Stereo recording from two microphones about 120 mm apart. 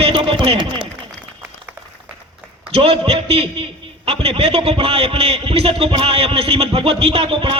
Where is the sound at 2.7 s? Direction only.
50° right (ahead or behind).